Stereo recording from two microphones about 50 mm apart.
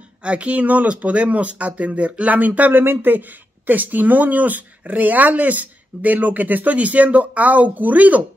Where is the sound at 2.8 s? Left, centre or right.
Right.